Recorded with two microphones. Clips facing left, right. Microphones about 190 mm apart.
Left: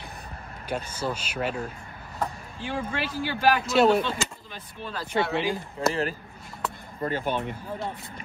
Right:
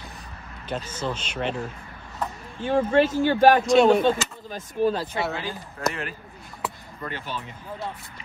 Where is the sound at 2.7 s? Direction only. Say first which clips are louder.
Right 11 dB; 40° right (ahead or behind).